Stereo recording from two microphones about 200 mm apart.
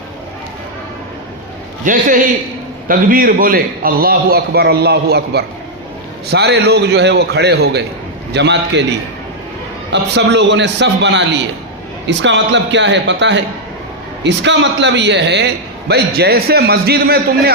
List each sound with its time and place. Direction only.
1.8 s a man's voice: 40° right (ahead or behind); by 8.8 s 60° right (ahead or behind)
9.9 s a man's voice: 60° right (ahead or behind)